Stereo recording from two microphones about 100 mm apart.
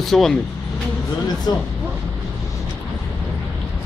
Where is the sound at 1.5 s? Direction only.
45° left (ahead or behind).